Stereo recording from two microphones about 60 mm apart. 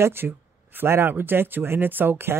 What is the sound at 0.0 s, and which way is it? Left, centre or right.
Speech, right.